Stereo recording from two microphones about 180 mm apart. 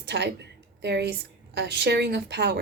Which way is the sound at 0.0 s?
70° right (ahead or behind).